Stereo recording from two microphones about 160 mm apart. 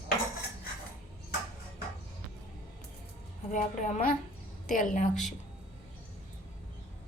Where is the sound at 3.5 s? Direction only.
55° left (ahead or behind).